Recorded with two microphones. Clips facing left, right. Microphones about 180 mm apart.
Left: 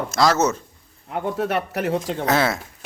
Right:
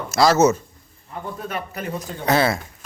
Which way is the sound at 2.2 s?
Centre (ahead or behind).